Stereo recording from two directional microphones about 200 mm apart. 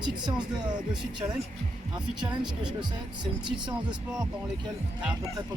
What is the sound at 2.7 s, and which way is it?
Speech, 20° right (ahead or behind).